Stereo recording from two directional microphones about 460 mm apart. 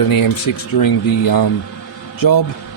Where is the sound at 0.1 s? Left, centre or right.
Left.